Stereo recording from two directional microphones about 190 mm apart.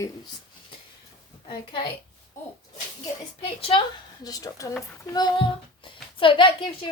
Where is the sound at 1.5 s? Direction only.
25° left (ahead or behind).